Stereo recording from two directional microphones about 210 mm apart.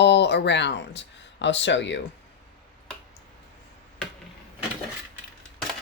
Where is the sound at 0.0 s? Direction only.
55° left (ahead or behind).